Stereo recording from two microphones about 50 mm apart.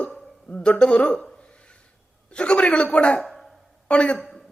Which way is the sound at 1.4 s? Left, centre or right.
Left.